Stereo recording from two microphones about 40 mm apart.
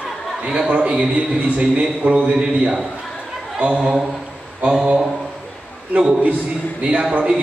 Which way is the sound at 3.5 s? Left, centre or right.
Right.